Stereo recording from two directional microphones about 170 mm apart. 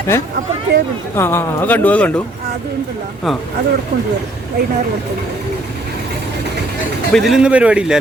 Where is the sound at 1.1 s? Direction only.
15° left (ahead or behind).